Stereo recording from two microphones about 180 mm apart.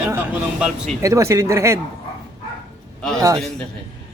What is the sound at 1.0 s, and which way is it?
Speech, 15° right (ahead or behind).